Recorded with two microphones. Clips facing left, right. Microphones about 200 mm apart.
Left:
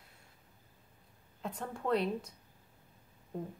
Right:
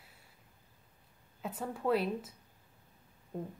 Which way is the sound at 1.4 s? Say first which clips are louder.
Right 2 dB; 5° right (ahead or behind).